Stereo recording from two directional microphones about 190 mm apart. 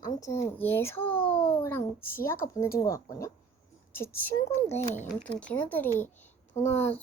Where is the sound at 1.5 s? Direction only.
10° left (ahead or behind).